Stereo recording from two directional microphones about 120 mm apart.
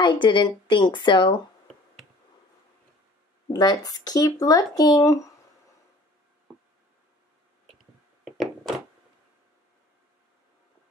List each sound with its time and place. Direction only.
0.0 s speech: 40° left (ahead or behind)
3.5 s speech: 35° left (ahead or behind)
8.2 s thunk: centre (ahead or behind)